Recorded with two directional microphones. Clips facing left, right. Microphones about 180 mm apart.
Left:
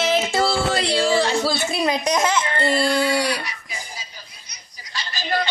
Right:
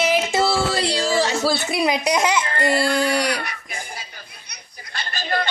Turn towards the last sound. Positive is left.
turn(degrees=-55)  # may be behind; listen again after turning